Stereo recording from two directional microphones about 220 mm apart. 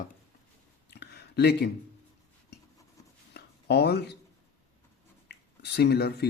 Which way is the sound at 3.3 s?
50° left (ahead or behind).